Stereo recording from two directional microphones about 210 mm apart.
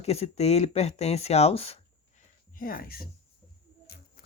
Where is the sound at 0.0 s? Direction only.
30° left (ahead or behind).